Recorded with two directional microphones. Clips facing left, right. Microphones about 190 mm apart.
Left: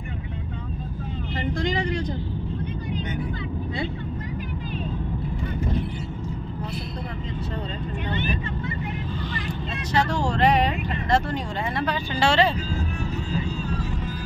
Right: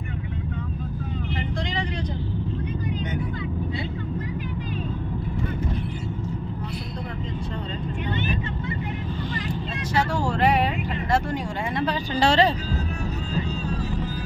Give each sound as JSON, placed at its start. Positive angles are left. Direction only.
{"t": 1.3, "sound": "vehicle", "side_deg": 45}
{"t": 9.9, "sound": "vehicle", "side_deg": -5}
{"t": 11.8, "sound": "speech", "side_deg": -35}